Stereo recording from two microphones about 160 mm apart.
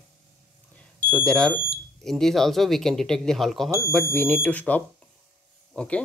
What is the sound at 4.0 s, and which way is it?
Speech, 10° left (ahead or behind).